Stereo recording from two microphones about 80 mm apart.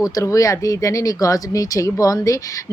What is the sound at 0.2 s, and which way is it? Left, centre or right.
Speech, left.